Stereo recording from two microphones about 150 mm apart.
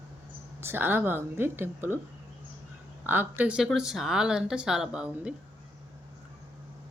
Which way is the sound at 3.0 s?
10° right (ahead or behind).